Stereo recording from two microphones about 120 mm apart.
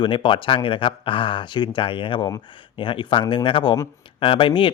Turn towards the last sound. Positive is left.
turn(degrees=45)  # may be behind; listen again after turning